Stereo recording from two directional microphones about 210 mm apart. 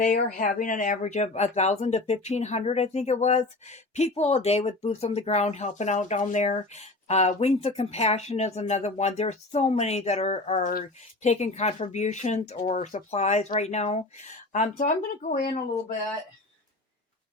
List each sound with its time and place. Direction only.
0.3 s speech: 40° left (ahead or behind)